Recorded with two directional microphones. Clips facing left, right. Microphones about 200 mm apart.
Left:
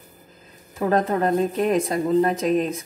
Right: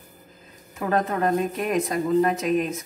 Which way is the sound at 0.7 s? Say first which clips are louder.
Left 3 dB; 35° left (ahead or behind).